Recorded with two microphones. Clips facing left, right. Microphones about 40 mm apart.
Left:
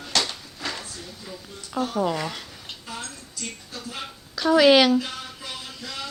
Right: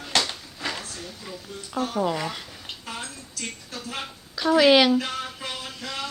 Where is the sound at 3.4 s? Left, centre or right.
Right.